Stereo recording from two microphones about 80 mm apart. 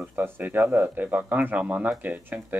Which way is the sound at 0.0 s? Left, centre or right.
Right.